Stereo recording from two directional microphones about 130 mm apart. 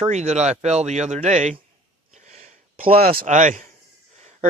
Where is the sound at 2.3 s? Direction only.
60° right (ahead or behind).